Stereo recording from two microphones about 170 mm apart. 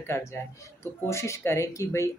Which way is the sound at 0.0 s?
15° left (ahead or behind).